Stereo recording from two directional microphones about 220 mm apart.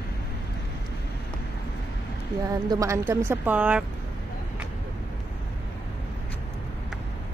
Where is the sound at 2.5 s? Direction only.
15° right (ahead or behind).